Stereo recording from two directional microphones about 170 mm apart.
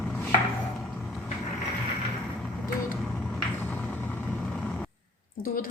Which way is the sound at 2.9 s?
5° left (ahead or behind).